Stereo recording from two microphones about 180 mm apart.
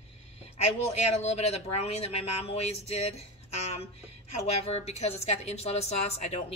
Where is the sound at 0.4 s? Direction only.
35° left (ahead or behind).